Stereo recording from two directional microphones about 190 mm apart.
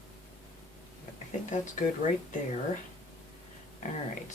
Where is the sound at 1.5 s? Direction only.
40° left (ahead or behind).